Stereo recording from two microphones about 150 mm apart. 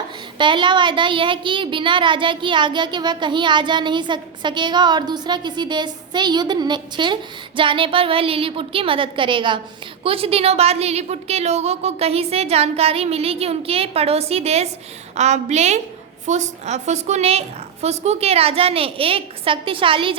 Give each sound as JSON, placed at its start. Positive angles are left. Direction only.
{"t": 0.3, "sound": "a woman's voice", "side_deg": -30}